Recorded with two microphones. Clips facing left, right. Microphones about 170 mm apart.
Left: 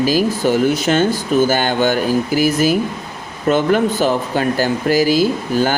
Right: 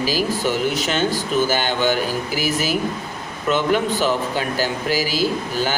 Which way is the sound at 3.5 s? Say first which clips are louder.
Left 4 dB; 45° left (ahead or behind).